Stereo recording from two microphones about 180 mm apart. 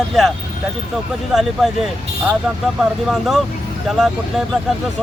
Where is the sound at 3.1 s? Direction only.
Centre (ahead or behind).